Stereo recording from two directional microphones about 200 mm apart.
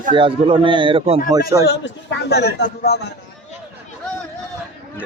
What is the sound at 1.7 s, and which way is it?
A man's voice, 60° left (ahead or behind).